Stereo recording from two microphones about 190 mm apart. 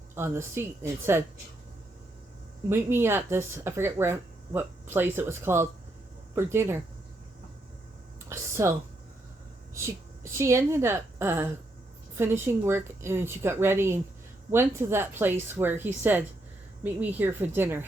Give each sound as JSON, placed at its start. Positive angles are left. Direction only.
{"t": 0.1, "sound": "speech", "side_deg": -10}
{"t": 2.6, "sound": "speech", "side_deg": -15}
{"t": 8.3, "sound": "a sound", "side_deg": -15}
{"t": 10.3, "sound": "speech", "side_deg": -15}